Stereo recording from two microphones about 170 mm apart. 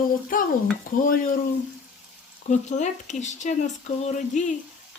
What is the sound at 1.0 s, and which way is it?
Speech, 55° left (ahead or behind).